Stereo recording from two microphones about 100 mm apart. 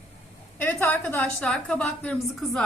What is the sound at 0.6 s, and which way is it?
A woman's voice, 20° left (ahead or behind).